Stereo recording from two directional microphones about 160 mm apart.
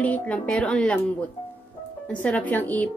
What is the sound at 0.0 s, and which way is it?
Speech, 10° left (ahead or behind).